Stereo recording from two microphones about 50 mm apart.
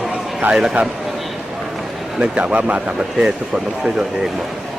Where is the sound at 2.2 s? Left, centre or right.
Centre.